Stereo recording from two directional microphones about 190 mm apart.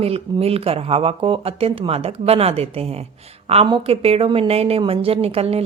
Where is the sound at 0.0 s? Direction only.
30° right (ahead or behind).